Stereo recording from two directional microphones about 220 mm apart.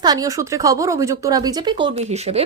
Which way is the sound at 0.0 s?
15° right (ahead or behind).